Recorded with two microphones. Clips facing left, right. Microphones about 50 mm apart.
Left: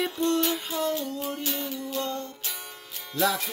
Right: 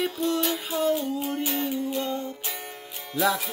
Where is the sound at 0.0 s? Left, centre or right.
Centre; by 2.0 s right.